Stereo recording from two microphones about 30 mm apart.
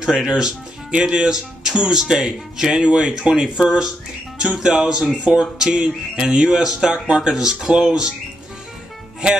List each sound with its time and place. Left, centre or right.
0.0 s speech: right
2.8 s speech: right